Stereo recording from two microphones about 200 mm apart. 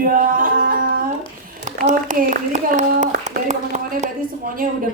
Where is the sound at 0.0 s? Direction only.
45° right (ahead or behind).